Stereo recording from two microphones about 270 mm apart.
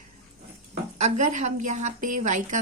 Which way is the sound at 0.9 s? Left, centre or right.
Right.